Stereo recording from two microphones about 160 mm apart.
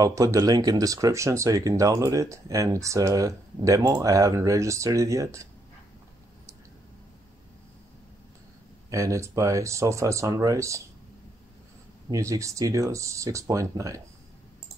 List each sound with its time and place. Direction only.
0.0 s speech: 20° right (ahead or behind)
8.9 s speech: 20° right (ahead or behind)
12.1 s speech: 20° right (ahead or behind)